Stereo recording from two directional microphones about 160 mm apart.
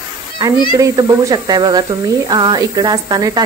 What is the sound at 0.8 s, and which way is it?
Speech, 25° right (ahead or behind).